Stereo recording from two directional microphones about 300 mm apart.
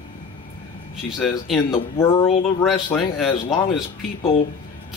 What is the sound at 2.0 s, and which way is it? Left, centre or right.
Speech, centre.